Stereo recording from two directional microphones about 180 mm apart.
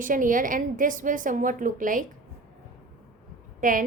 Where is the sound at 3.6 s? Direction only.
50° right (ahead or behind).